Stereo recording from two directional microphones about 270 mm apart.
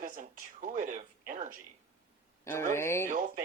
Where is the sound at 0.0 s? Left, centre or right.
Right.